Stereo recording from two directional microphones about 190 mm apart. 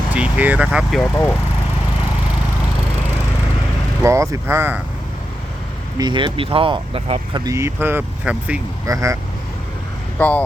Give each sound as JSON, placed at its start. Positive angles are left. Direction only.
{"t": 0.1, "sound": "speech", "side_deg": -10}
{"t": 4.0, "sound": "speech", "side_deg": -15}
{"t": 6.0, "sound": "speech", "side_deg": -25}
{"t": 10.2, "sound": "speech", "side_deg": 10}